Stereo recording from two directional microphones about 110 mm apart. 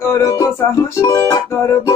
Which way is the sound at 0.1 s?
30° left (ahead or behind).